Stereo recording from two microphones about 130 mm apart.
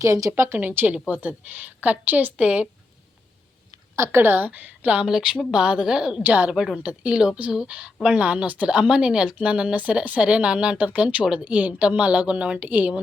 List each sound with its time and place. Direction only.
0.0 s a woman's voice: 25° right (ahead or behind)
3.9 s speech: 20° right (ahead or behind)